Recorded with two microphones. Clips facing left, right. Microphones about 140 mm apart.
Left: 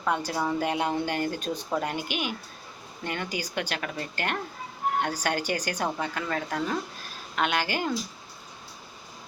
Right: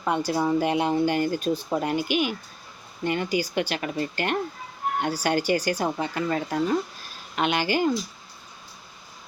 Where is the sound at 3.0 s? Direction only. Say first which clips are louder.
Right 7 dB; 10° right (ahead or behind).